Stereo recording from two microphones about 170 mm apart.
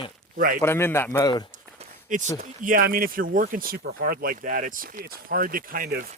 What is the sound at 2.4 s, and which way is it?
Speech, 50° right (ahead or behind).